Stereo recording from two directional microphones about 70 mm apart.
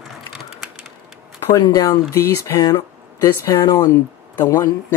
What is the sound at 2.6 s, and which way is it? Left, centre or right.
Speech, left.